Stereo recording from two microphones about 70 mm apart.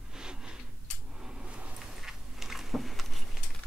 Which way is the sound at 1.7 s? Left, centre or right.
Centre.